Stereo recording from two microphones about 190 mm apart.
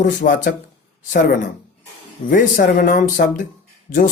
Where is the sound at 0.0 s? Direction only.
45° left (ahead or behind).